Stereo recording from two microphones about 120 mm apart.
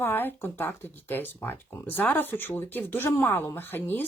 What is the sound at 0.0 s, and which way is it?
Speech, 15° left (ahead or behind).